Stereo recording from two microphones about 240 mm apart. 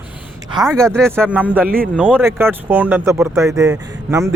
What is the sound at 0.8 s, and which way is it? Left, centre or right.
A man's voice, centre.